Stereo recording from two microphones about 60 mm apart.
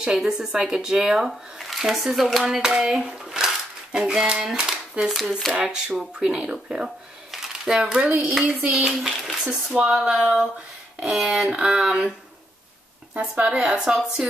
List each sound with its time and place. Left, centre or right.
0.0 s speech: centre
8.3 s dishes: centre
8.8 s speech: centre
13.1 s speech: centre